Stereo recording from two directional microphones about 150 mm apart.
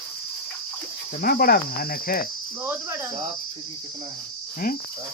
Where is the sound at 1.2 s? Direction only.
80° left.